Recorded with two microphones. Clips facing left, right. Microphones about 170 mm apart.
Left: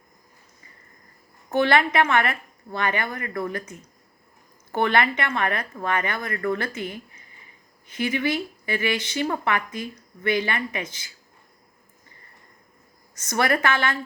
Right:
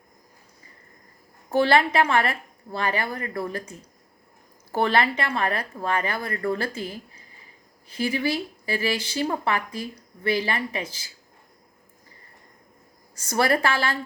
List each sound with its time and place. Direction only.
1.5 s speech: 30° right (ahead or behind)
13.4 s speech: 30° right (ahead or behind)